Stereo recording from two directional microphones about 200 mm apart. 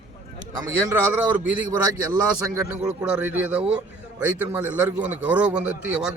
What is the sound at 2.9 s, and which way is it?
A man's voice, 5° right (ahead or behind).